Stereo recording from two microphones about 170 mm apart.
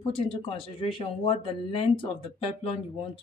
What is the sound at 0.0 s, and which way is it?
Speech, 30° left (ahead or behind).